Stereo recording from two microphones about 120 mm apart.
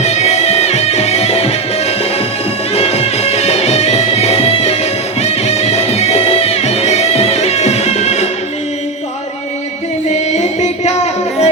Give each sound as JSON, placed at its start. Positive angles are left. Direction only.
{"t": 0.0, "sound": "music", "side_deg": 65}
{"t": 2.7, "sound": "music", "side_deg": 60}
{"t": 10.1, "sound": "music", "side_deg": 70}